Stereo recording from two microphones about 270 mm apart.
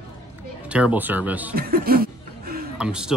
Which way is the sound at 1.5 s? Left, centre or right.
Right.